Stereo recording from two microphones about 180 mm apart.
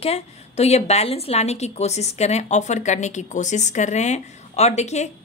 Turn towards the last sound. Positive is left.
turn(degrees=40)  # may be behind; listen again after turning